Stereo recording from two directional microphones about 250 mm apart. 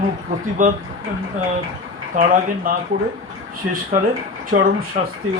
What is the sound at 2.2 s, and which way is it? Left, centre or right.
Speech, right.